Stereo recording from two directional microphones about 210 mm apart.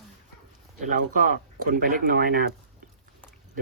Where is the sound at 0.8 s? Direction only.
40° right (ahead or behind).